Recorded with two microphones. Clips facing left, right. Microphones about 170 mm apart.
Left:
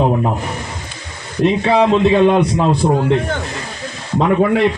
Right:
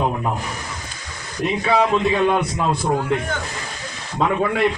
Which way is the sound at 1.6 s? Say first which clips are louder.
Left 4 dB; 25° left (ahead or behind).